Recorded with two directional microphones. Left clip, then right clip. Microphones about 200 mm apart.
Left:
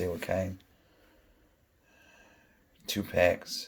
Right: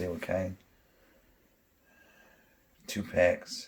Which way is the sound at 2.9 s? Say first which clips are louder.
Even; 25° left (ahead or behind).